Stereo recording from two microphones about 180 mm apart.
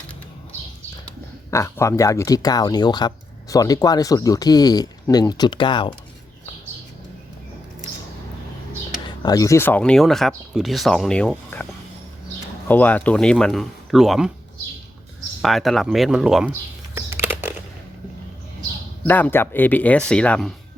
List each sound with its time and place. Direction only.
1.5 s speech: 15° left (ahead or behind)
9.0 s speech: 20° left (ahead or behind); by 11.6 s 5° left (ahead or behind)
12.6 s speech: 10° left (ahead or behind)
15.4 s speech: centre (ahead or behind)
16.5 s computer keyboard: 15° right (ahead or behind)
19.0 s speech: 10° left (ahead or behind)